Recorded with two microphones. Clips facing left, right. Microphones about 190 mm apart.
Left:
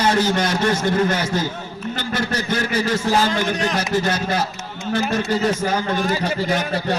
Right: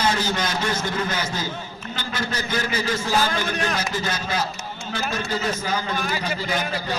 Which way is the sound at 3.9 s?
65° left (ahead or behind).